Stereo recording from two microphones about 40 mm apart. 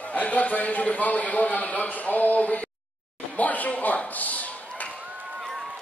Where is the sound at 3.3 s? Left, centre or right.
Left.